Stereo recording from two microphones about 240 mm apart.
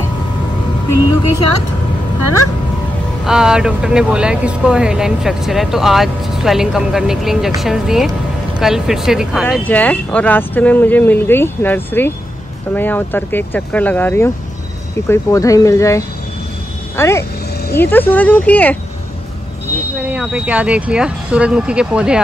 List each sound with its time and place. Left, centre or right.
0.8 s speech: right
2.1 s speech: right
3.3 s speech: centre
20.1 s speech: centre